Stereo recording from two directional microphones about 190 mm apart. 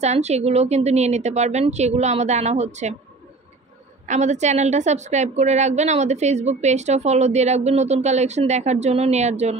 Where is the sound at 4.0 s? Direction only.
35° right (ahead or behind).